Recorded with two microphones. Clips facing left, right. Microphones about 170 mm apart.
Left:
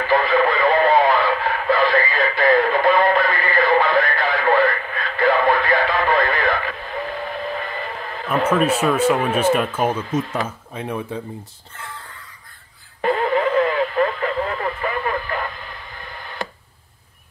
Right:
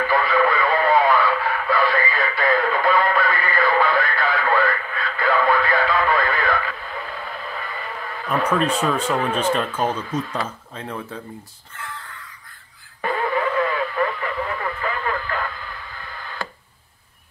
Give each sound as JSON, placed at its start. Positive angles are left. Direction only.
{"t": 0.0, "sound": "radio", "side_deg": 25}
{"t": 8.5, "sound": "speech", "side_deg": 10}
{"t": 13.0, "sound": "radio", "side_deg": 25}